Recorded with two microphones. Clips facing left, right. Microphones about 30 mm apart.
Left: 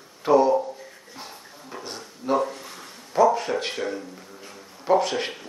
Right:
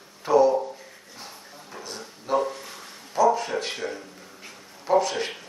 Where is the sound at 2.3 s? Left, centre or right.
Left.